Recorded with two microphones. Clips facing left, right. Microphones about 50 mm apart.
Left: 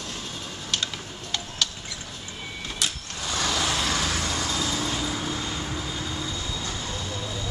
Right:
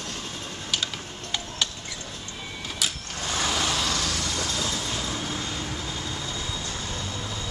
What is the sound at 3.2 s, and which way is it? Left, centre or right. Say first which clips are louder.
Vehicle: even; centre.